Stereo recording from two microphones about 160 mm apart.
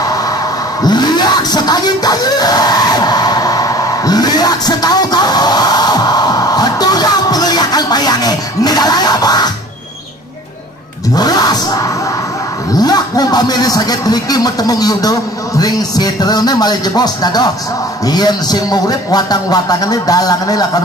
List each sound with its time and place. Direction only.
0.8 s a sound: 25° left (ahead or behind)
11.1 s music: 25° left (ahead or behind)
12.7 s speech: 25° left (ahead or behind)